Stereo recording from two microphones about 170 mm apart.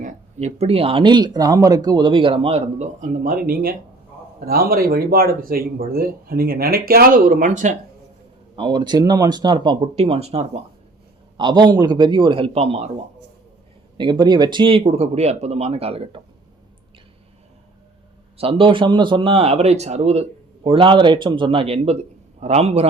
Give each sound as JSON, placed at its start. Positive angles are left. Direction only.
{"t": 0.0, "sound": "speech", "side_deg": -40}
{"t": 8.5, "sound": "speech", "side_deg": -30}
{"t": 11.3, "sound": "speech", "side_deg": -25}
{"t": 14.0, "sound": "speech", "side_deg": -25}
{"t": 18.3, "sound": "speech", "side_deg": -35}